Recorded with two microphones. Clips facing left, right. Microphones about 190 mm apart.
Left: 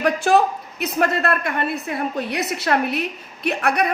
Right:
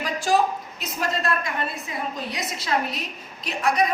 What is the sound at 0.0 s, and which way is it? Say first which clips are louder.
A man's voice: left 5 dB; 60° left (ahead or behind).